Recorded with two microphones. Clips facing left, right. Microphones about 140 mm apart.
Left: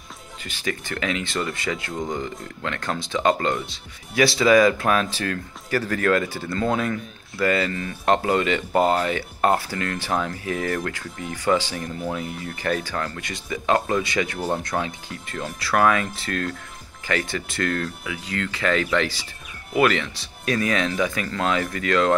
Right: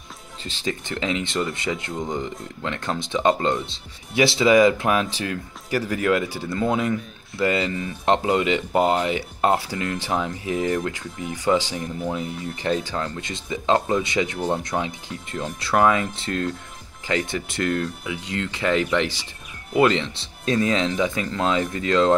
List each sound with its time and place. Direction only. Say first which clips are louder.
0.4 s speech: right 1 dB; 25° right (ahead or behind)